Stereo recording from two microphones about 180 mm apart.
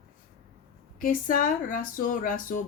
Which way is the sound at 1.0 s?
50° left (ahead or behind).